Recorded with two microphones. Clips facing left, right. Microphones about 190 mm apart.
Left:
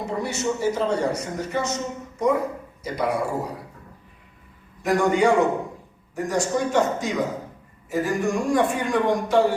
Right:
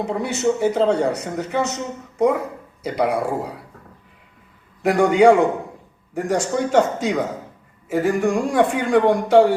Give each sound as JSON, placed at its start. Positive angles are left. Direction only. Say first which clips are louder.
{"t": 0.0, "sound": "speech", "louder": "right 5 dB", "side_deg": -60}
{"t": 4.8, "sound": "speech", "louder": "right 5 dB", "side_deg": -60}